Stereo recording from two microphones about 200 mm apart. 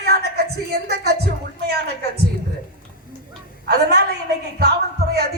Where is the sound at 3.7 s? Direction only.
55° right (ahead or behind).